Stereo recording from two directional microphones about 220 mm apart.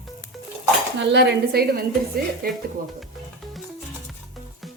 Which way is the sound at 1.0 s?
50° right (ahead or behind).